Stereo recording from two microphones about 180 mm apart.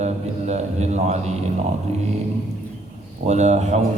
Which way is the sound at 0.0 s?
40° right (ahead or behind).